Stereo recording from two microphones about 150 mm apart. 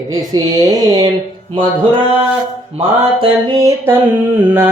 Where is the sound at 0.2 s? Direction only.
25° right (ahead or behind).